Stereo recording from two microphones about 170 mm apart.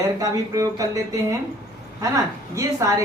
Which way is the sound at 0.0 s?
20° right (ahead or behind).